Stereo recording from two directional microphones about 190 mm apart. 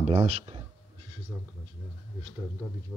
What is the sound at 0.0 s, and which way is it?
Speech, 30° right (ahead or behind).